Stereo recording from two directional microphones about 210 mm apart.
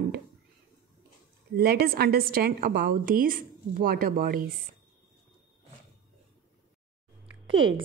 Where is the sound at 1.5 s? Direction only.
45° right (ahead or behind).